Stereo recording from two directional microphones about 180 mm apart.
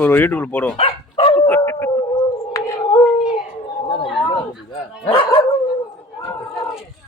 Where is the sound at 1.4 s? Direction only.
15° left (ahead or behind).